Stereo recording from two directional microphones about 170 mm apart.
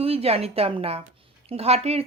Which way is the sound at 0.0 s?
35° right (ahead or behind).